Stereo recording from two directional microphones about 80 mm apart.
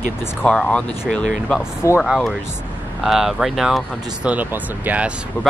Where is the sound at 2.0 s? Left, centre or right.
Centre.